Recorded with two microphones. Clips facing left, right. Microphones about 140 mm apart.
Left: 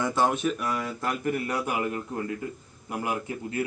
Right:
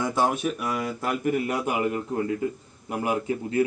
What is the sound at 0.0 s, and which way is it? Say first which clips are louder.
Speech: even; 5° right (ahead or behind).